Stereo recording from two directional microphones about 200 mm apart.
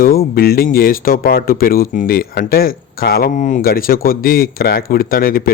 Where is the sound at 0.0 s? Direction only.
50° left (ahead or behind).